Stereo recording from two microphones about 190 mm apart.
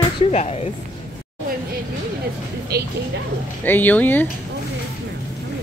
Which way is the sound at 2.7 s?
55° right (ahead or behind).